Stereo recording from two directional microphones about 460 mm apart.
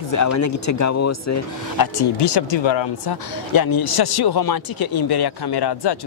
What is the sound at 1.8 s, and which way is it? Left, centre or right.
Speech, left.